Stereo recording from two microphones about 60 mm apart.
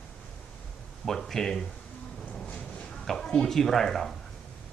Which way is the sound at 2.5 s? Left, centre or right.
Centre.